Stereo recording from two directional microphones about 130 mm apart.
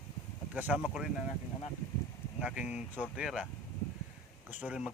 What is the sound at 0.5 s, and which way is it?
Speech, 10° right (ahead or behind).